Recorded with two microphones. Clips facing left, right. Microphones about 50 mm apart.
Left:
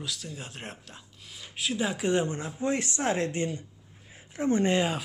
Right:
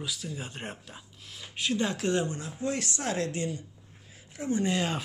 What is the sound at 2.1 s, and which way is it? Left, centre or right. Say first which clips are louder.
Speech: left 2 dB; left.